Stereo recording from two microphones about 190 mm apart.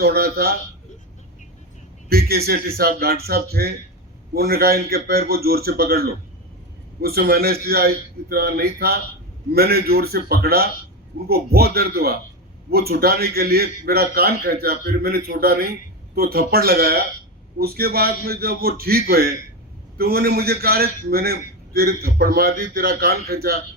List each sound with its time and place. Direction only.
0.0 s a man's voice: 55° right (ahead or behind)
2.0 s a man's voice: 55° right (ahead or behind)